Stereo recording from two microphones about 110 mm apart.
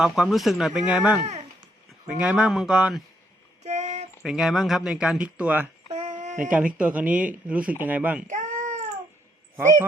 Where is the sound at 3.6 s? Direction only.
90° right.